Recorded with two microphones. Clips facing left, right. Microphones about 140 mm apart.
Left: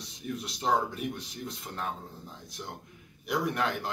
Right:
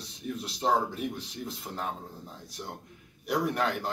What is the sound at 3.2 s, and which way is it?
Speech, centre (ahead or behind).